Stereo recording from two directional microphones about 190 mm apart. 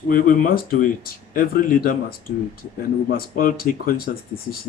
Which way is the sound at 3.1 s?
50° left (ahead or behind).